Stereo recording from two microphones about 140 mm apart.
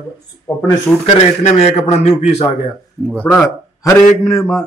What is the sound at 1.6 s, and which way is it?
Speech, 50° left (ahead or behind).